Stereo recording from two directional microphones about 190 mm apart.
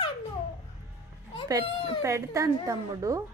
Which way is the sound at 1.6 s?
30° left (ahead or behind).